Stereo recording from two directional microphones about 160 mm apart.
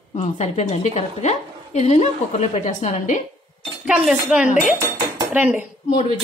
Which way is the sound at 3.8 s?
5° right (ahead or behind).